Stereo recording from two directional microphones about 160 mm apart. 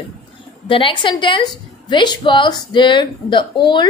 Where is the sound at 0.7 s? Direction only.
35° left (ahead or behind).